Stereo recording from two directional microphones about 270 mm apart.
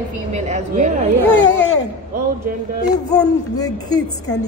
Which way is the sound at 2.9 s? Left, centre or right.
Centre.